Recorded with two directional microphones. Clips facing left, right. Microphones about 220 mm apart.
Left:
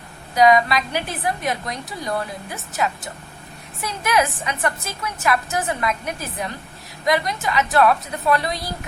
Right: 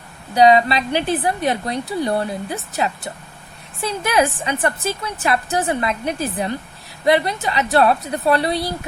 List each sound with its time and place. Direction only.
0.3 s a woman's voice: 30° right (ahead or behind)
3.8 s a woman's voice: 30° right (ahead or behind)